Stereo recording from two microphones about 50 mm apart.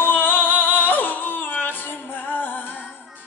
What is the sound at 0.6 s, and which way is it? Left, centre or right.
Music, left.